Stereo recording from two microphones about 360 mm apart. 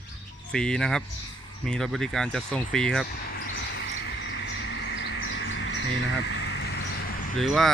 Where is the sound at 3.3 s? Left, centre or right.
Left.